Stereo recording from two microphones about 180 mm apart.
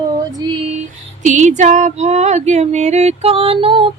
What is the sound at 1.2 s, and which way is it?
Female singing, 45° right (ahead or behind).